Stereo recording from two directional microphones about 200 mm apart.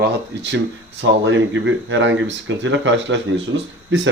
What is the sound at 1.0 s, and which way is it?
Speech, 65° right (ahead or behind).